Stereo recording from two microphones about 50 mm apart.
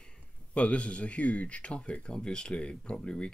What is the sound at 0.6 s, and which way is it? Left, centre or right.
Speech, left.